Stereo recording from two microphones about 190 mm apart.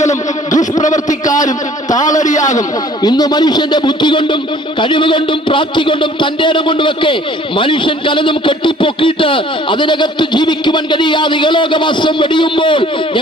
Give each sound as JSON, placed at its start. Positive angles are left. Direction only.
{"t": 0.0, "sound": "a sound", "side_deg": 40}
{"t": 2.2, "sound": "a man's voice", "side_deg": 40}
{"t": 2.6, "sound": "speech", "side_deg": 20}